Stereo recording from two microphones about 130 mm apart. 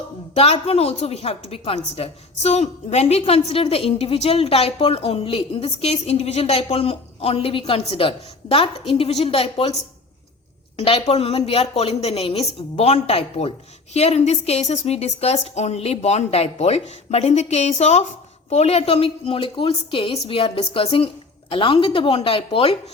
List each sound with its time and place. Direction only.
0.3 s a woman's voice: 50° left (ahead or behind)
10.8 s a woman's voice: 45° left (ahead or behind)